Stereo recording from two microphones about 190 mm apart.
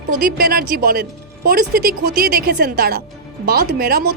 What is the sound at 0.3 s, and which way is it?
Speech, 50° right (ahead or behind).